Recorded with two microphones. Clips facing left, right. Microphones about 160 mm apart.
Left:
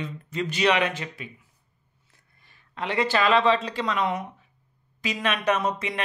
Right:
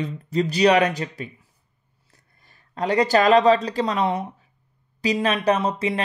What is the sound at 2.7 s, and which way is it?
Speech, 40° right (ahead or behind).